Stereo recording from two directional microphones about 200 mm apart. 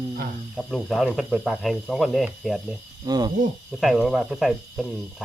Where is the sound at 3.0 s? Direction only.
20° right (ahead or behind).